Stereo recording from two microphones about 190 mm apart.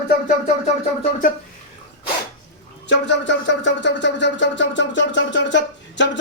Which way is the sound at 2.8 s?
70° left (ahead or behind).